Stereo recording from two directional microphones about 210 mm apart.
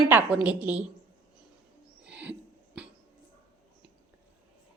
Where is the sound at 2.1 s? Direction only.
5° right (ahead or behind).